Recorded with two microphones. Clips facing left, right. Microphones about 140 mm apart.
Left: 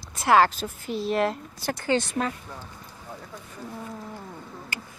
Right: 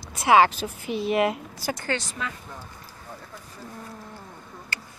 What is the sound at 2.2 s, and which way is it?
Speech, 40° left (ahead or behind).